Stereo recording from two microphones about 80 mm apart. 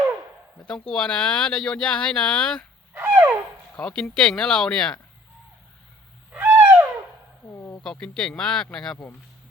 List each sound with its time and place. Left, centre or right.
0.7 s speech: centre
3.1 s a sound: centre
3.8 s speech: centre
6.3 s owl: centre
7.5 s a sound: left
7.9 s speech: centre